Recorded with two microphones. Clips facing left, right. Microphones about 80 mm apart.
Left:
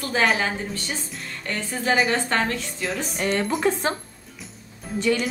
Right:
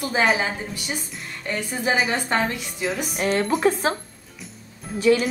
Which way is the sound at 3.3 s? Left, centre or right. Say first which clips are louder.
Right 2 dB; centre.